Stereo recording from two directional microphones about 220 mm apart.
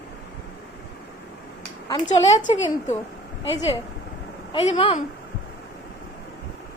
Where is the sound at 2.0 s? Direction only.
30° left (ahead or behind).